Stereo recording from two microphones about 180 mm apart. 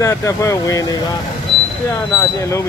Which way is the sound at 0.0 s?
15° left (ahead or behind).